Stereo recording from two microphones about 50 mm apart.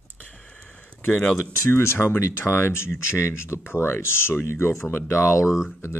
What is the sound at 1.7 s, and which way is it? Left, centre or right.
Speech, left.